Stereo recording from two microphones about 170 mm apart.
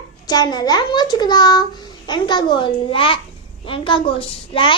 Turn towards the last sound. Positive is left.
turn(degrees=30)  # may be behind; listen again after turning